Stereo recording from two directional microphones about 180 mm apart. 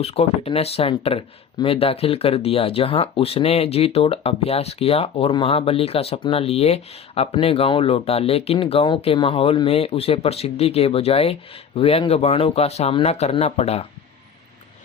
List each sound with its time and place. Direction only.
0.0 s speech: 35° left (ahead or behind)